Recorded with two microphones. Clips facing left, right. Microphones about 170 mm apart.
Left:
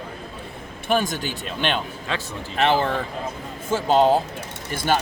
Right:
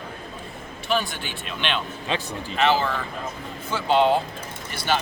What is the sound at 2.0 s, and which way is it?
Speech, 20° right (ahead or behind).